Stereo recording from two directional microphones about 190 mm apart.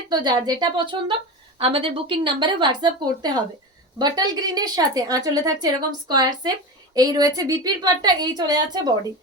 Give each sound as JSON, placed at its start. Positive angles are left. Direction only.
{"t": 0.1, "sound": "a woman's voice", "side_deg": -20}